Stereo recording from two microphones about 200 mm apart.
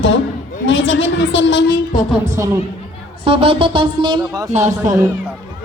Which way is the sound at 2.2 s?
15° right (ahead or behind).